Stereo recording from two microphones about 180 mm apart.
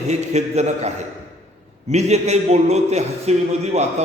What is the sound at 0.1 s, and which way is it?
A man's voice, 40° right (ahead or behind).